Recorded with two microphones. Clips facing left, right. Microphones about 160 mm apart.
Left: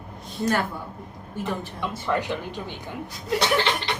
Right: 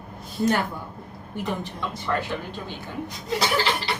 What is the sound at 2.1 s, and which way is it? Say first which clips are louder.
Speech: left 1 dB; 15° left (ahead or behind).